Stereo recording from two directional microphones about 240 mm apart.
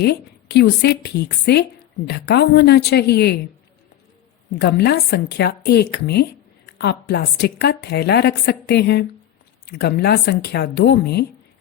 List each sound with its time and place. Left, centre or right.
0.0 s a woman's voice: left
4.5 s a woman's voice: left